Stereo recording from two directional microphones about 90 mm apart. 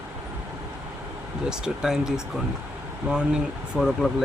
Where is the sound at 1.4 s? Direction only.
5° right (ahead or behind).